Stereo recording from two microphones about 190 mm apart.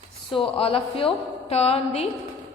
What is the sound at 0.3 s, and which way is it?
A woman's voice, 30° left (ahead or behind).